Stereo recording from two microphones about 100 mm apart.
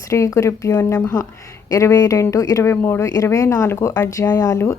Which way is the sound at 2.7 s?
25° left (ahead or behind).